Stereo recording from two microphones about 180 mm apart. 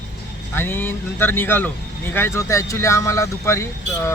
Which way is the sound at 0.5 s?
10° left (ahead or behind).